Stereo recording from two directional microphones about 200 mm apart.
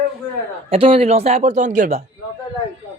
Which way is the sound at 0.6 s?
30° right (ahead or behind).